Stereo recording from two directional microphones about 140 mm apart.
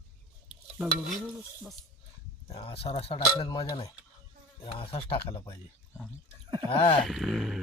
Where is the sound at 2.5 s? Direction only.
45° left (ahead or behind).